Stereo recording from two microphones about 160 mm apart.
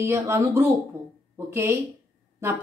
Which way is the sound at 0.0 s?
15° right (ahead or behind).